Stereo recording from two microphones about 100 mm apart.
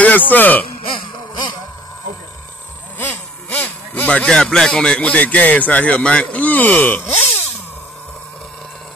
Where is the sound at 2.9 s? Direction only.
15° left (ahead or behind).